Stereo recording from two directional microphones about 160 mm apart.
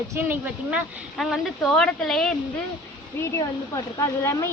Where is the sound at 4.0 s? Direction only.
15° left (ahead or behind).